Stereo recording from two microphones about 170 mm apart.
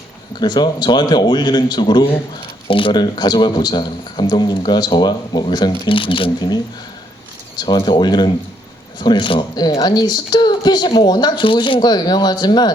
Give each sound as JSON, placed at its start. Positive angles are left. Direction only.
{"t": 0.3, "sound": "speech", "side_deg": 25}